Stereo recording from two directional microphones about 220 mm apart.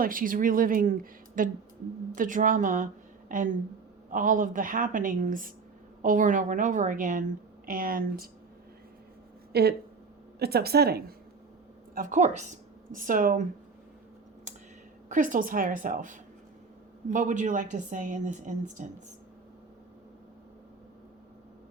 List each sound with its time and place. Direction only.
0.0 s a woman's voice: 40° right (ahead or behind)
9.5 s a woman's voice: 45° right (ahead or behind)
11.9 s a woman's voice: 35° right (ahead or behind)
15.1 s a woman's voice: 35° right (ahead or behind)